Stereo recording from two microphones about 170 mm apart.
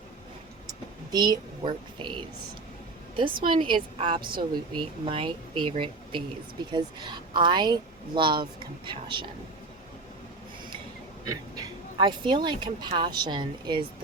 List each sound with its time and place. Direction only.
1.1 s speech: 25° right (ahead or behind)
3.2 s speech: 30° right (ahead or behind)
11.3 s speech: 25° right (ahead or behind)